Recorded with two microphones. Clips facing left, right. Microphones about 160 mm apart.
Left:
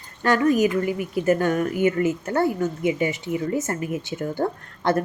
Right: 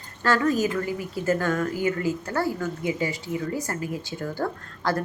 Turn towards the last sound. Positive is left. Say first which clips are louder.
# left 4 dB
turn(degrees=20)  # may be behind; listen again after turning